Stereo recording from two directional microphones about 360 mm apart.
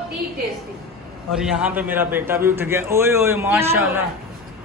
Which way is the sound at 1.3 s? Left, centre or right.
Centre.